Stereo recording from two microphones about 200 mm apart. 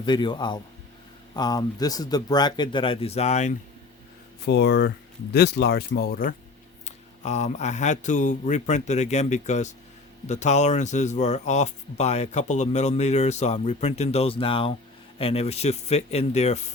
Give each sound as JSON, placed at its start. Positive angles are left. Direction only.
{"t": 0.0, "sound": "speech", "side_deg": 20}
{"t": 4.4, "sound": "speech", "side_deg": 60}
{"t": 6.8, "sound": "speech", "side_deg": 35}